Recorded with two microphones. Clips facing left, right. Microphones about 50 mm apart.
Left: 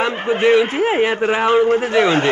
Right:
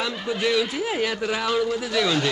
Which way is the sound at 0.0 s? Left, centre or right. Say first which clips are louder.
Left 9 dB; left.